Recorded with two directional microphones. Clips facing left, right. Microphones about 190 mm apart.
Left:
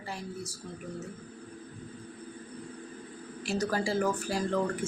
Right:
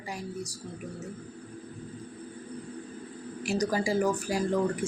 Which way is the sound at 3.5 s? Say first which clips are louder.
Right 2 dB; 15° right (ahead or behind).